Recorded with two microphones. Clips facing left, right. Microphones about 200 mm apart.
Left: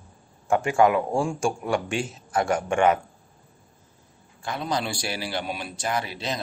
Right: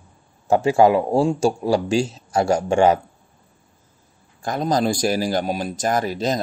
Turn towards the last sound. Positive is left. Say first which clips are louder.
# right 8 dB
turn(degrees=-45)  # may be behind; listen again after turning